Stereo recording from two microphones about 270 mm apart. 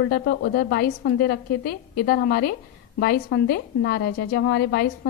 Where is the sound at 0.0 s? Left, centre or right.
Left.